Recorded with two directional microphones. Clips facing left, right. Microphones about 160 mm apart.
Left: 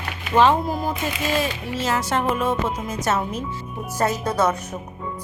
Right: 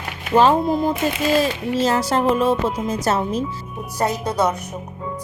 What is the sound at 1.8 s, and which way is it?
Speech, 35° right (ahead or behind).